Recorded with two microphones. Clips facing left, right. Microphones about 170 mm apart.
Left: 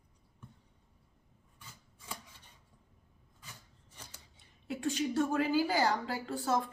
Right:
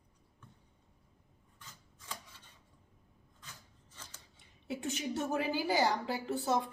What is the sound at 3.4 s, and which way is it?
Rub, 15° left (ahead or behind).